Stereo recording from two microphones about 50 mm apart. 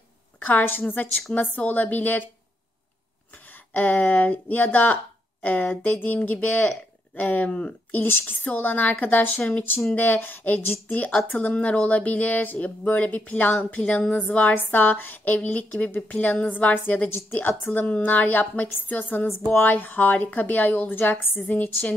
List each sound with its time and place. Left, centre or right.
0.4 s speech: left
3.7 s speech: left
8.0 s speech: left